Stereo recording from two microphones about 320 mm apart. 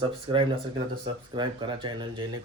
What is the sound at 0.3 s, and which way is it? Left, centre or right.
A man's voice, centre.